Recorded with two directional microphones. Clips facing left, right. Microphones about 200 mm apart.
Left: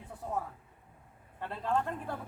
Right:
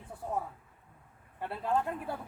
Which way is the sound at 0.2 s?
10° right (ahead or behind).